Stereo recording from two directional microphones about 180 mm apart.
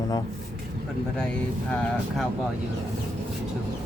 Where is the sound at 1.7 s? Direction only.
5° left (ahead or behind).